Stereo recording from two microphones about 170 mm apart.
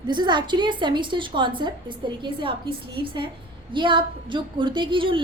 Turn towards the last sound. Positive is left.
turn(degrees=-30)  # may be behind; listen again after turning